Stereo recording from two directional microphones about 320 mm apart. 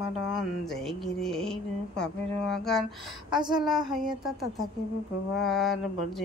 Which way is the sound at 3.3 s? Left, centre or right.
Centre.